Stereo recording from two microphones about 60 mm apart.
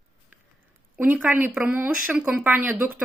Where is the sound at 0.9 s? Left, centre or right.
Right.